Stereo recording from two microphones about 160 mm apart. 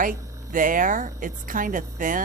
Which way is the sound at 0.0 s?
55° right (ahead or behind).